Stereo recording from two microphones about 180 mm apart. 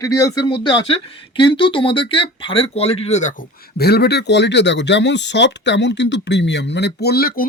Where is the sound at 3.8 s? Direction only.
65° left (ahead or behind).